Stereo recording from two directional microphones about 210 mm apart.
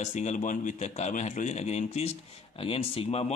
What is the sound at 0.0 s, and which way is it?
Speech, 35° left (ahead or behind).